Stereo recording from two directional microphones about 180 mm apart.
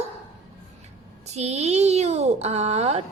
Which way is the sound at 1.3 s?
35° right (ahead or behind).